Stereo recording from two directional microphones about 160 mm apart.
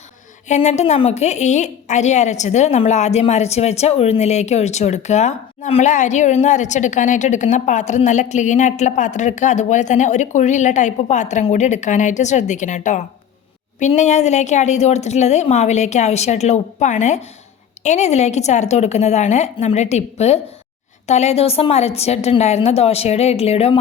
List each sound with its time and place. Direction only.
0.4 s a woman's voice: 45° left (ahead or behind)